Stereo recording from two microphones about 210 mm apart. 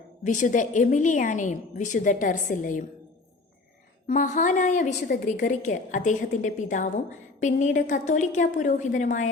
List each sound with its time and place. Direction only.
0.3 s a woman's voice: 35° left (ahead or behind)
4.0 s a woman's voice: 35° left (ahead or behind)